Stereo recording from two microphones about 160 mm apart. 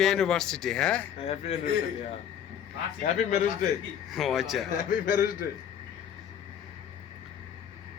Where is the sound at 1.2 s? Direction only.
40° left (ahead or behind).